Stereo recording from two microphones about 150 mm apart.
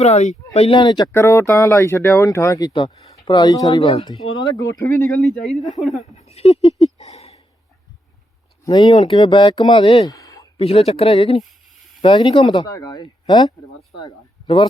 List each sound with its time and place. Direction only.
0.0 s speech: 50° left (ahead or behind)
0.5 s speech: 40° left (ahead or behind)
1.1 s speech: 20° left (ahead or behind)
4.9 s speech: 15° left (ahead or behind)
5.2 s speech: centre (ahead or behind)
6.1 s a sound: 45° left (ahead or behind)
8.6 s speech: 25° left (ahead or behind)
10.6 s speech: 40° left (ahead or behind)